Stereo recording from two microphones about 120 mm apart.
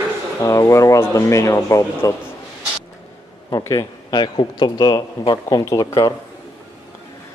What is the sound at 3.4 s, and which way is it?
Speech, 30° left (ahead or behind).